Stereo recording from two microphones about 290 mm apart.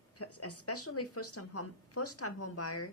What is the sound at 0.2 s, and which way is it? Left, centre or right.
A woman's voice, left.